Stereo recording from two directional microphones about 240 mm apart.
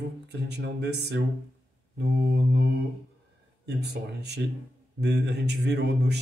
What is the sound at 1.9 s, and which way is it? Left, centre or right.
Mantra, right.